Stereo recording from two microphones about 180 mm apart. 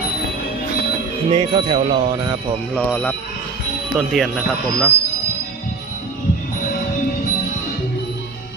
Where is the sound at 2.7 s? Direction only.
10° left (ahead or behind).